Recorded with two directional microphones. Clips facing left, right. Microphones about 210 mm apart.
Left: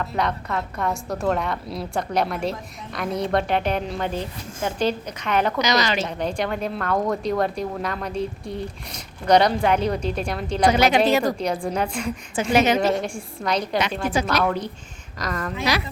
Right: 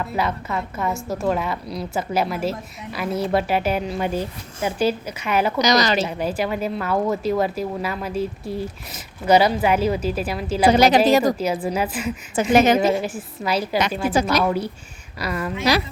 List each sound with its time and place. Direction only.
0.0 s a woman's voice: 5° right (ahead or behind)
5.5 s a woman's voice: 40° right (ahead or behind)
6.1 s a woman's voice: 5° right (ahead or behind)
10.7 s a woman's voice: 35° right (ahead or behind)
11.3 s a woman's voice: 5° right (ahead or behind)
12.5 s a woman's voice: 50° right (ahead or behind)
12.8 s a woman's voice: 5° right (ahead or behind)